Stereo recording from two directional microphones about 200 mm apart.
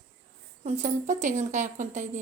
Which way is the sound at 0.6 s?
35° right (ahead or behind).